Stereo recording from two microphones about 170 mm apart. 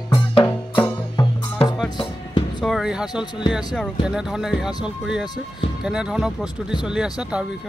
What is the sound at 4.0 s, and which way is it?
Speech, 5° right (ahead or behind).